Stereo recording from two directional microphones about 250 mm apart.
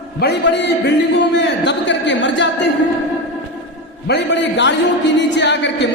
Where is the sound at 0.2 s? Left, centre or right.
Left.